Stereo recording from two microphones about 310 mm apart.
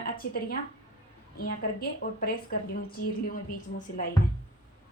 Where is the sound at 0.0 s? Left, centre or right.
Left.